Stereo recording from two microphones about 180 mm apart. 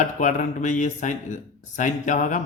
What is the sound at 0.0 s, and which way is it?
A man's voice, 45° left (ahead or behind).